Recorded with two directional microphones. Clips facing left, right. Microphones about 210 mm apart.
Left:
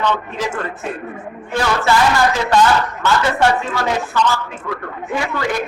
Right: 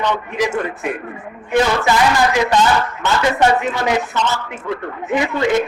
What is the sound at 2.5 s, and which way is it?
A man's voice, 20° right (ahead or behind).